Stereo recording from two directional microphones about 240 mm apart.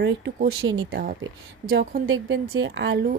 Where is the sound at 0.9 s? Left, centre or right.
Right.